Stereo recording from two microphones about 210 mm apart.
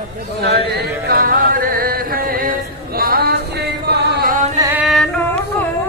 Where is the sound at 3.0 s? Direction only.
45° right (ahead or behind).